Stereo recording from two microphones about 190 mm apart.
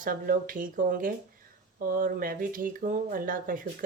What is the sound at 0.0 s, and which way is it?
Speech, 45° right (ahead or behind).